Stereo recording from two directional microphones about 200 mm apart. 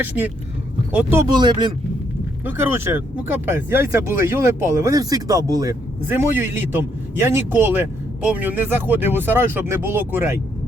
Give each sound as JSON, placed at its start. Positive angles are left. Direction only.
{"t": 0.0, "sound": "speech", "side_deg": -10}
{"t": 2.4, "sound": "speech", "side_deg": -10}